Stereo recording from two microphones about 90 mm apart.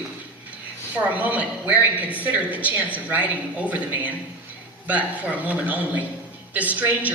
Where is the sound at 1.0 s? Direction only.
15° right (ahead or behind).